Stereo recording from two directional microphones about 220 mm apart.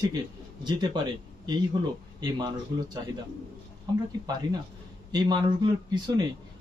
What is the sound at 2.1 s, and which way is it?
A man's voice, 20° right (ahead or behind).